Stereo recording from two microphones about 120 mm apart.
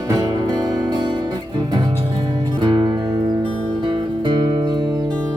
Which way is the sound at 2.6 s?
40° right (ahead or behind).